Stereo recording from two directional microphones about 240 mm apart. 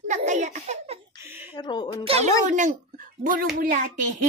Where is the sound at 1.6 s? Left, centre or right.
Centre.